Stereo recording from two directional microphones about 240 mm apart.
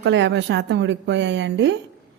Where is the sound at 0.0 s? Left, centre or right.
Right.